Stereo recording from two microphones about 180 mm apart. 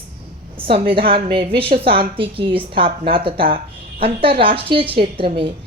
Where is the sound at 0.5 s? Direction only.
30° right (ahead or behind).